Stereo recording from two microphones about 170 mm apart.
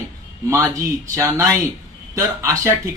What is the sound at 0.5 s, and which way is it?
Speech, 15° right (ahead or behind).